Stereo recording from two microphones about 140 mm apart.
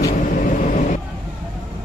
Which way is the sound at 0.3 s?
65° left (ahead or behind).